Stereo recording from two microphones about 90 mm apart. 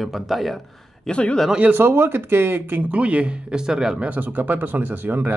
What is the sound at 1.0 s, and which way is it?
Speech, 10° left (ahead or behind).